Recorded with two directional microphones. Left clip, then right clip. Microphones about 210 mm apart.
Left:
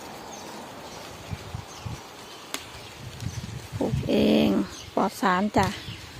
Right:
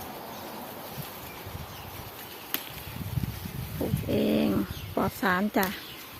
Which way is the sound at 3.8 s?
20° left (ahead or behind).